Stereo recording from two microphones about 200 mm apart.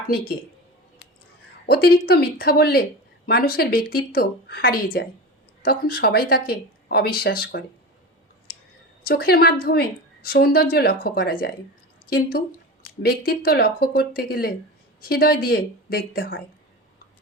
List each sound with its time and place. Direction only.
1.6 s speech: 55° left (ahead or behind)
9.0 s speech: 50° left (ahead or behind)